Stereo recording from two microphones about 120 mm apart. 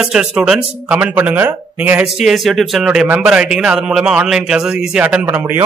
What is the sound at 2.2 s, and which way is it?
A man's voice, centre (ahead or behind).